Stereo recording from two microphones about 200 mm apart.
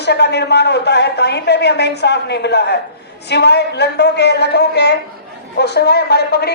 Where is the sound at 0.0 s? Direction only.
55° left (ahead or behind).